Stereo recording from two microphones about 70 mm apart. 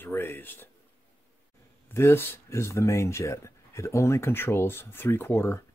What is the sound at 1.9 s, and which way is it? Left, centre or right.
Speech, left.